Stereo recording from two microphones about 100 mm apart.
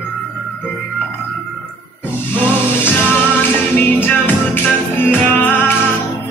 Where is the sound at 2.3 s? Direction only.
20° left (ahead or behind).